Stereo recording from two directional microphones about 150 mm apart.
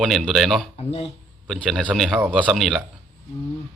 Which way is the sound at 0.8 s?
40° left (ahead or behind).